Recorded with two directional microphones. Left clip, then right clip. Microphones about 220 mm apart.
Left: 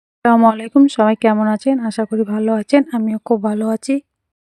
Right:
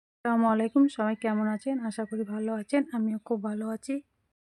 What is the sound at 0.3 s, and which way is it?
Speech, 40° left (ahead or behind).